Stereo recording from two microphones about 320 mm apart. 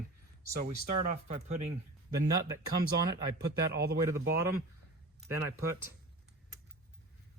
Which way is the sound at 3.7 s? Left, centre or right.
Right.